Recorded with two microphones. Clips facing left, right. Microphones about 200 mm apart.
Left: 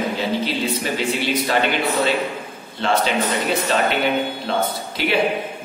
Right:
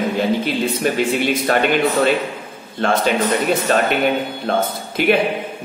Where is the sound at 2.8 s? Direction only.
50° right (ahead or behind).